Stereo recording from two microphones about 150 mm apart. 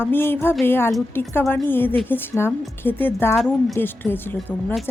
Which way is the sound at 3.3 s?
Centre (ahead or behind).